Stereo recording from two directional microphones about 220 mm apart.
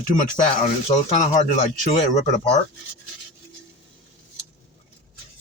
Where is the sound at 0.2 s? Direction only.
35° left (ahead or behind).